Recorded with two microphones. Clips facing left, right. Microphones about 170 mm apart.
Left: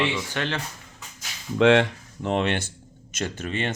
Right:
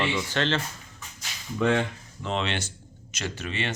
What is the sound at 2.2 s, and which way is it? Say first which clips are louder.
Speech: left 5 dB; 55° left (ahead or behind).